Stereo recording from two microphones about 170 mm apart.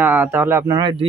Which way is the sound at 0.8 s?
30° right (ahead or behind).